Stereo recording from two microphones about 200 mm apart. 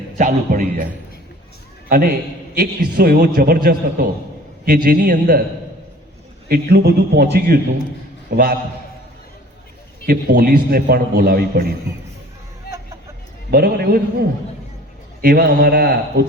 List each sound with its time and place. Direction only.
0.2 s speech: 40° right (ahead or behind)
1.9 s a man's voice: 50° right (ahead or behind)
6.5 s a man's voice: 50° right (ahead or behind)
10.1 s a man's voice: 45° right (ahead or behind)
12.7 s hubbub: 55° left (ahead or behind)
13.5 s a man's voice: 50° right (ahead or behind)